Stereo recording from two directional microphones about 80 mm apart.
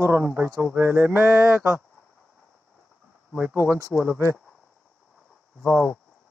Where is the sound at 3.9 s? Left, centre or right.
Left.